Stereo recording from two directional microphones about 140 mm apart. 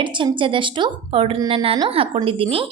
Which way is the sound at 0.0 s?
35° right (ahead or behind).